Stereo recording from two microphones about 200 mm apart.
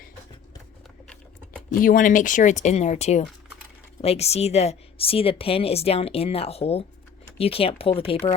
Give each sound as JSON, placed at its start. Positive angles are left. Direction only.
{"t": 1.0, "sound": "typing", "side_deg": 5}
{"t": 1.8, "sound": "a woman's voice", "side_deg": 45}